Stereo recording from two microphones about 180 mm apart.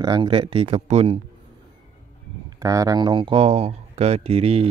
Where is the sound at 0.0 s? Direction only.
25° right (ahead or behind).